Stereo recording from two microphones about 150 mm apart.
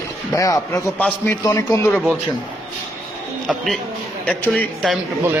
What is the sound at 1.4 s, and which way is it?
Speech, 20° left (ahead or behind).